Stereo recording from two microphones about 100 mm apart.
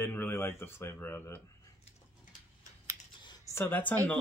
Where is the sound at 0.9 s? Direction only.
20° left (ahead or behind).